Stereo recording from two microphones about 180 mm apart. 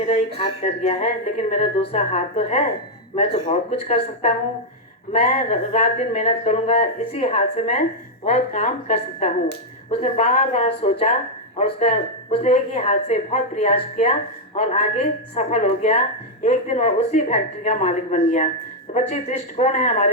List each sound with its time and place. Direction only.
0.3 s a woman's voice: 35° left (ahead or behind)